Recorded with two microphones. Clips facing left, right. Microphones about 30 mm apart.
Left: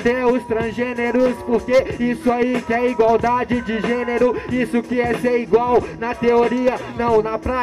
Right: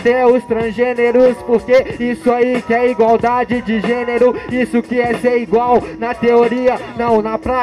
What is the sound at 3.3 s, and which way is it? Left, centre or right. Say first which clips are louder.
Speech: right 4 dB; right.